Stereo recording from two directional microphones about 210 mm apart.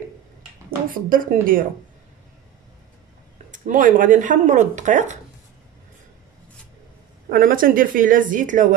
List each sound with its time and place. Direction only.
0.8 s speech: 40° right (ahead or behind)
3.5 s speech: 35° right (ahead or behind)
7.2 s speech: 45° right (ahead or behind)